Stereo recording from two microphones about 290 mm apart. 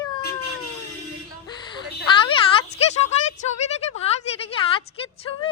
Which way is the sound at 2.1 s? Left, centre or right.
Left.